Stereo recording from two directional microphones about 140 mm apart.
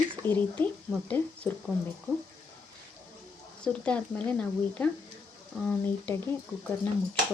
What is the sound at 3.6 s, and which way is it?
Speech, 10° left (ahead or behind).